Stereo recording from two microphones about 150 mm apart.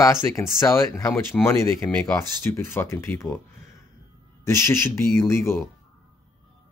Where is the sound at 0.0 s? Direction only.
20° left (ahead or behind).